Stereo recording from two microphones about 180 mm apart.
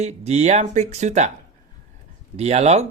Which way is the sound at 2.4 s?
35° right (ahead or behind).